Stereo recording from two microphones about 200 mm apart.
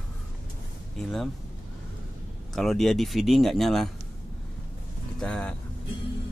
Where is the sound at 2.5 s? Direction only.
Centre (ahead or behind).